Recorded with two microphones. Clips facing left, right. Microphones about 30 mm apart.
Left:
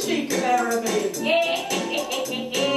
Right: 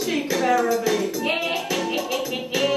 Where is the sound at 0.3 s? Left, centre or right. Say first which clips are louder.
Right 3 dB; centre.